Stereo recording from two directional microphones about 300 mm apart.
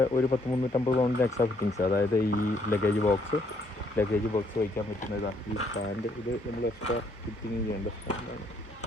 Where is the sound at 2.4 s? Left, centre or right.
Left.